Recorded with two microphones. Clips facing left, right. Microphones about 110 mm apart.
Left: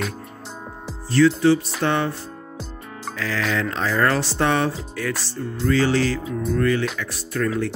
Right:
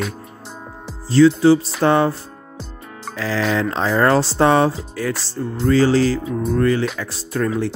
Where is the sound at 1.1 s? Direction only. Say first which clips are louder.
Right 4 dB; 30° right (ahead or behind).